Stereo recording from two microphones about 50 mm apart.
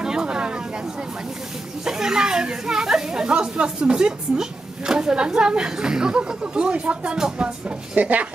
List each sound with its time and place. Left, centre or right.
0.0 s a sound: centre
1.9 s speech: centre
7.9 s speech: right